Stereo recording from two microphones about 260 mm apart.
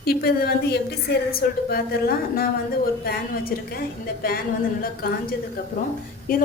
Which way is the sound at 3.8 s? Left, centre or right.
Left.